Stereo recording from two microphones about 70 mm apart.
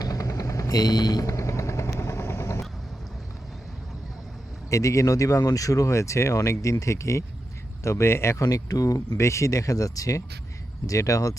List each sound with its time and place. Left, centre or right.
0.0 s vehicle: left
4.7 s speech: left
8.4 s speech: left
9.1 s speech: left